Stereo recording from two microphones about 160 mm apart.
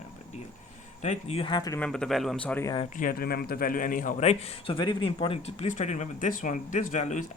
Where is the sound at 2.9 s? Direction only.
65° left (ahead or behind).